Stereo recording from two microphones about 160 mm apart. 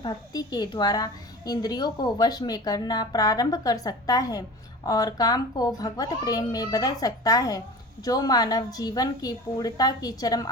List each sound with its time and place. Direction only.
0.0 s a woman's voice: 25° left (ahead or behind)